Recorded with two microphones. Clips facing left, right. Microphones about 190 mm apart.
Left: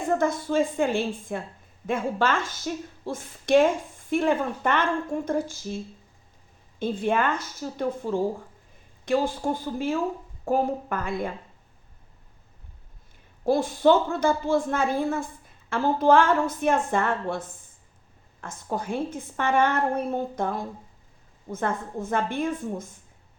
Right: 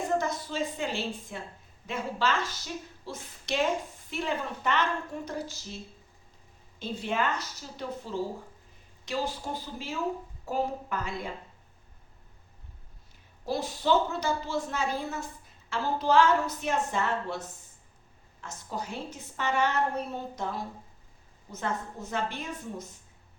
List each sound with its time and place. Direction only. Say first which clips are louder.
0.2 s a woman's voice: left 8 dB; 50° left (ahead or behind)
13.4 s a woman's voice: left 10 dB; 50° left (ahead or behind)